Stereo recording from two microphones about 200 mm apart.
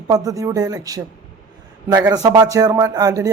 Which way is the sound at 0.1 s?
15° right (ahead or behind).